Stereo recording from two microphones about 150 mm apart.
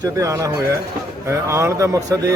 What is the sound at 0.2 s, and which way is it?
Speech, 20° right (ahead or behind).